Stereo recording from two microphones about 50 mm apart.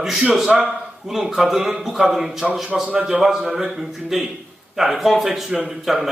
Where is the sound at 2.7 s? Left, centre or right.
Right.